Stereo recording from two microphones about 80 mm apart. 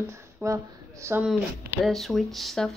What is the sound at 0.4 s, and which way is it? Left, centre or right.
Speech, right.